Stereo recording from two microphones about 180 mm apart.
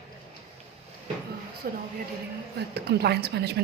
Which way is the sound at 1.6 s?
55° right (ahead or behind).